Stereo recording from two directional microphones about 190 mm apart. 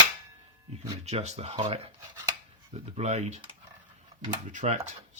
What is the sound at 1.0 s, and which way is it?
Speech, 35° right (ahead or behind).